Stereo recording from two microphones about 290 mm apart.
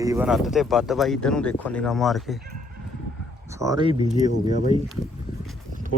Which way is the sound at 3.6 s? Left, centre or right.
Centre.